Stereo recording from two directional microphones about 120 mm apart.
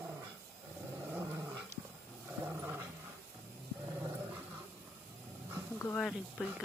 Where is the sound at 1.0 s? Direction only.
20° right (ahead or behind).